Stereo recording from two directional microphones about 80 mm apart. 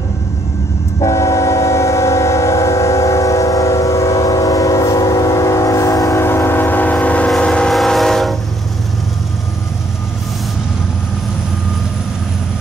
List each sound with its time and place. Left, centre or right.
1.0 s train: left
6.1 s train: left; by 8.4 s centre